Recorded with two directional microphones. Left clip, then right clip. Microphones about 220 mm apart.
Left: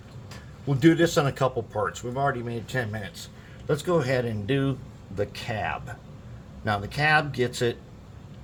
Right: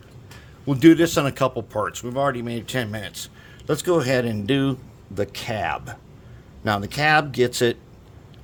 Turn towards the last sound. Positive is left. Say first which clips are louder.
# right 6 dB
turn(degrees=-55)  # may be behind; listen again after turning